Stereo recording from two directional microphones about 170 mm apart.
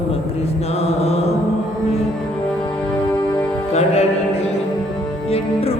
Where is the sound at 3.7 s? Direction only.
40° left (ahead or behind).